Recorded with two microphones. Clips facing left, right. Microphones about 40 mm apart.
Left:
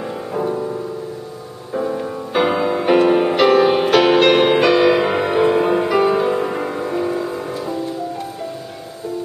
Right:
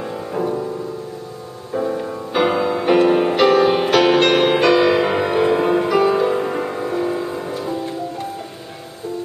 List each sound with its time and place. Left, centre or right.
0.0 s music: centre